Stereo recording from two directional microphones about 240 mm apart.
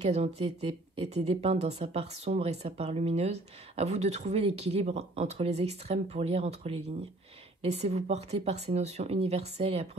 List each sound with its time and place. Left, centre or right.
0.0 s a woman's voice: right